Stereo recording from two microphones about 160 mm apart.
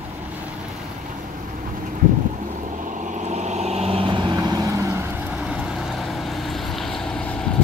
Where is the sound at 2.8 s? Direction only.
50° right (ahead or behind); by 5.0 s 20° right (ahead or behind).